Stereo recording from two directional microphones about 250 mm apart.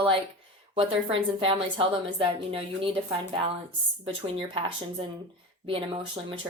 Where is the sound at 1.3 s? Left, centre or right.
Right.